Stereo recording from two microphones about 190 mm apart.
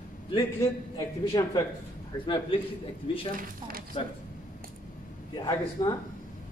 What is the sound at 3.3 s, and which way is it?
Speech, 50° right (ahead or behind).